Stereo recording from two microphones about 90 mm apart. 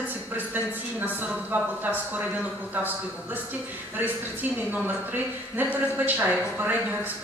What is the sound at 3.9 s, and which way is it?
Speech, 20° right (ahead or behind).